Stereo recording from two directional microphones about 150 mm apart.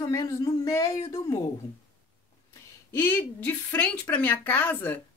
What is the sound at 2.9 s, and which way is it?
Speech, 15° left (ahead or behind).